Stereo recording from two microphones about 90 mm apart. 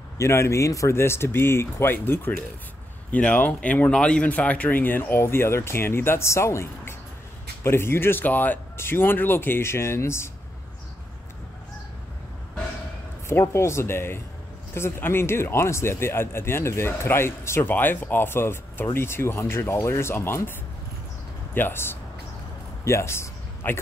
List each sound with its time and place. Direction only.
0.2 s speech: 30° left (ahead or behind)
13.3 s speech: 30° left (ahead or behind)
21.5 s speech: 25° left (ahead or behind)